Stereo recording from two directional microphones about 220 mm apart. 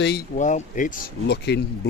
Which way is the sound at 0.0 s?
50° left (ahead or behind).